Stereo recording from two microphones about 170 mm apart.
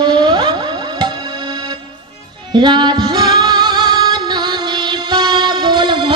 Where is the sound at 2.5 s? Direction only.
25° right (ahead or behind).